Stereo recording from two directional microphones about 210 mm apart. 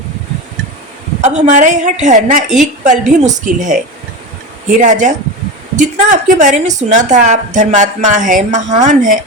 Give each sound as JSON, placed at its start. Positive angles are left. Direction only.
{"t": 1.2, "sound": "a woman's voice", "side_deg": -35}
{"t": 4.8, "sound": "a woman's voice", "side_deg": -35}